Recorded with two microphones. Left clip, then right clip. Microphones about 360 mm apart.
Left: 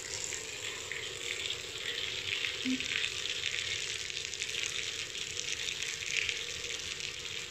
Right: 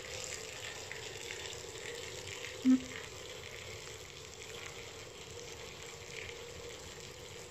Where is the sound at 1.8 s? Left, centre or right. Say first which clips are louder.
Left 11 dB; right.